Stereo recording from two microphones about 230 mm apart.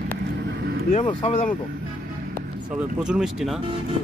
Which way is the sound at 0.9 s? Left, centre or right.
Left.